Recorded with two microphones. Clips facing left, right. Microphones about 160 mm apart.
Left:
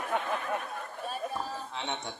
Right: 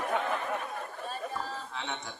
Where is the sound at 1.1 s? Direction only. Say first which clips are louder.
Left 2 dB; 10° left (ahead or behind).